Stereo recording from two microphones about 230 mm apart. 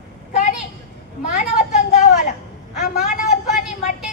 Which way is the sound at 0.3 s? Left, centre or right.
Left.